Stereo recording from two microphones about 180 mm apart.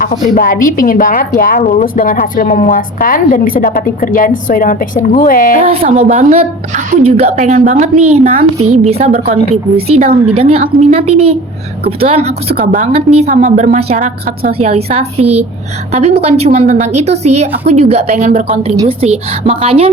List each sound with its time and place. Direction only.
0.0 s a woman's voice: 50° left (ahead or behind)
5.5 s a woman's voice: 30° right (ahead or behind)
10.3 s a woman's voice: 35° right (ahead or behind)